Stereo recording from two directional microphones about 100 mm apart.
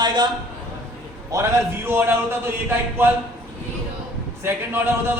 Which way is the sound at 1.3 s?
25° right (ahead or behind).